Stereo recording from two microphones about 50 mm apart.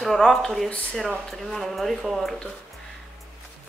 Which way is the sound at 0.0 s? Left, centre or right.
Centre.